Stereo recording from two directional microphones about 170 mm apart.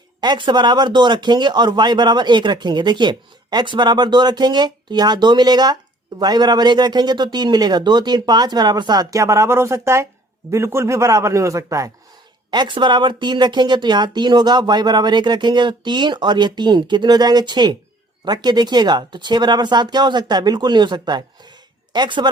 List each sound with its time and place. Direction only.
0.2 s a man's voice: 25° right (ahead or behind)